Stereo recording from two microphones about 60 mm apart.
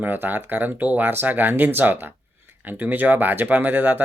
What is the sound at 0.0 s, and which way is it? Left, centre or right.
Speech, right.